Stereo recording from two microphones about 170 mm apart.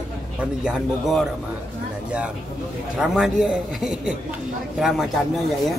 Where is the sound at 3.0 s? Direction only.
5° right (ahead or behind).